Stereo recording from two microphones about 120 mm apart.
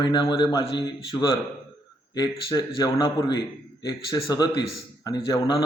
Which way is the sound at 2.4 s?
35° left (ahead or behind).